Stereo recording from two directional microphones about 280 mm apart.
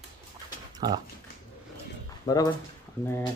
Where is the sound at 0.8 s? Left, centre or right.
Centre.